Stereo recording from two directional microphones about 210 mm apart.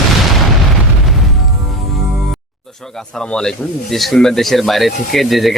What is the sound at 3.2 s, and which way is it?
Speech, 5° left (ahead or behind).